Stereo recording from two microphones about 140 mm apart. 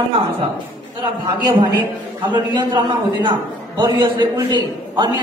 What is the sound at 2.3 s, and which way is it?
Speech, 35° right (ahead or behind).